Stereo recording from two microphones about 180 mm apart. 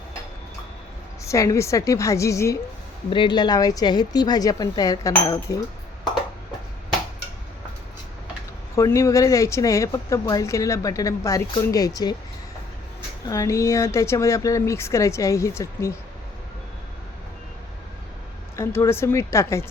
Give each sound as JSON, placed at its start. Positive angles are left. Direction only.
{"t": 1.2, "sound": "a woman's voice", "side_deg": 15}
{"t": 8.7, "sound": "speech", "side_deg": 15}
{"t": 13.2, "sound": "speech", "side_deg": 20}
{"t": 18.5, "sound": "speech", "side_deg": 15}